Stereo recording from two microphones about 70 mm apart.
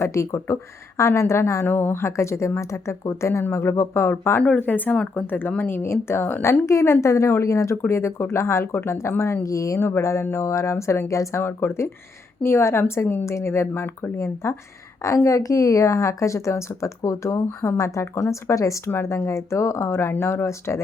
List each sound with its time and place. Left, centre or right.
0.0 s speech: left
1.6 s a woman's voice: left
11.4 s a woman's voice: left